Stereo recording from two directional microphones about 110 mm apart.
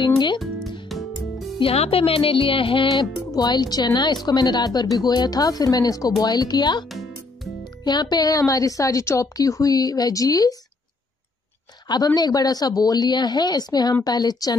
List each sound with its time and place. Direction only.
0.0 s music: 40° left (ahead or behind)
0.4 s music: centre (ahead or behind)
1.6 s speech: 60° left (ahead or behind)
3.3 s a woman's voice: 40° left (ahead or behind)
11.9 s a woman's voice: 35° left (ahead or behind)